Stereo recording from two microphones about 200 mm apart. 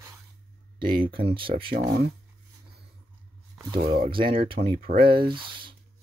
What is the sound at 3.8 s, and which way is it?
Speech, 50° right (ahead or behind).